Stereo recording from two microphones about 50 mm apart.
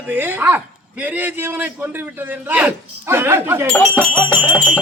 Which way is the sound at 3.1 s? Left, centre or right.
Right.